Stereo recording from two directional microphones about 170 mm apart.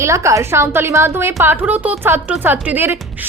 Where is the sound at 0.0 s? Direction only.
15° right (ahead or behind).